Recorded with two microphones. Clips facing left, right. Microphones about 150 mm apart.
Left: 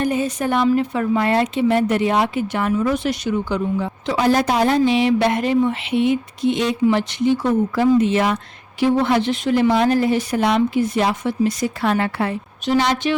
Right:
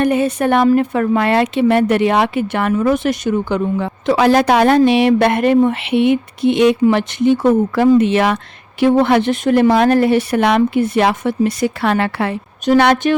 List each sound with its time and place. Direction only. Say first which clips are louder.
0.0 s a woman's voice: right 5 dB; 65° right (ahead or behind)
8.8 s a woman's voice: right 5 dB; 60° right (ahead or behind); by 12.4 s 80° right
12.6 s a woman's voice: right 6 dB; 60° right (ahead or behind)